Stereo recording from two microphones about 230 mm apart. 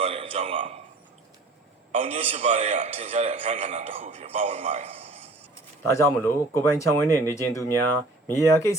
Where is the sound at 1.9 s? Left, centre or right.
Right.